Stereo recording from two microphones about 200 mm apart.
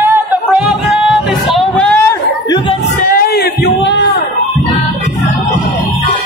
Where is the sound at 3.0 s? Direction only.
45° left (ahead or behind); by 4.0 s 60° left (ahead or behind).